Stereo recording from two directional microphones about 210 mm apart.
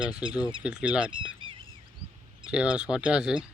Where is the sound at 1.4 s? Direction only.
25° right (ahead or behind).